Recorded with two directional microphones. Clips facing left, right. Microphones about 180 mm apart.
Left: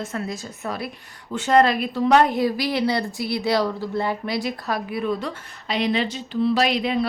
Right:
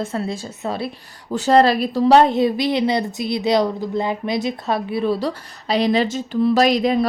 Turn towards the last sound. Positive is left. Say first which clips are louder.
# right 5 dB
turn(degrees=-40)  # may be behind; listen again after turning